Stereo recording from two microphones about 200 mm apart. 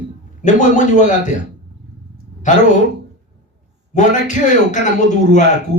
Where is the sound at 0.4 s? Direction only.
40° left (ahead or behind).